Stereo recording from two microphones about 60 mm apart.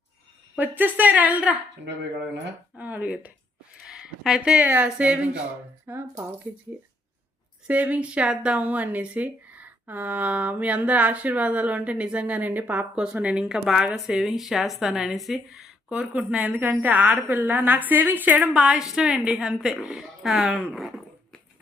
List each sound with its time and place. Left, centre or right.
0.5 s speech: right
2.7 s speech: right
3.8 s speech: centre
4.6 s speech: right
5.8 s speech: right
6.5 s speech: right
7.7 s a woman's voice: right
18.5 s a woman's voice: centre